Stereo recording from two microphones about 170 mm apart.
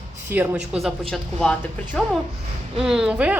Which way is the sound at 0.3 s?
10° right (ahead or behind).